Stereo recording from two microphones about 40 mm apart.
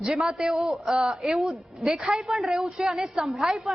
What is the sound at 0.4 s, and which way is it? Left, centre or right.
Speech, centre.